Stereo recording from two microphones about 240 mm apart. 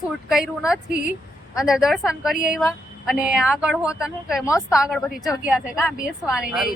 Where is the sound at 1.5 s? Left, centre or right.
Centre.